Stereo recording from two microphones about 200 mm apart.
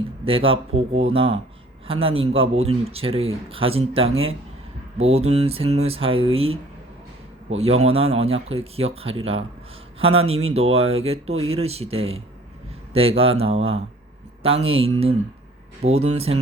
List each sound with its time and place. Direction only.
0.3 s speech: 25° right (ahead or behind)
7.6 s speech: 30° right (ahead or behind)
11.3 s speech: 90° right
11.5 s speech: 30° right (ahead or behind)